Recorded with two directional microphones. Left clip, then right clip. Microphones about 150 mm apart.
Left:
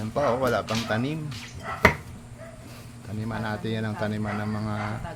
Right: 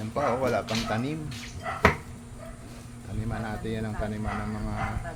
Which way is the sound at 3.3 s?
65° left (ahead or behind).